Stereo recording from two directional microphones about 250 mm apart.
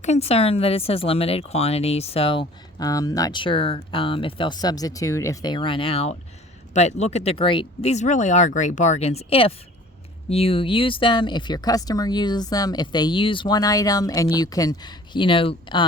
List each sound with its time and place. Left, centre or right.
0.0 s speech: left